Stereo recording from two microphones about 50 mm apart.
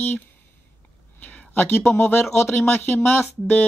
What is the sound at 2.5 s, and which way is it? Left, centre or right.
Speech, left.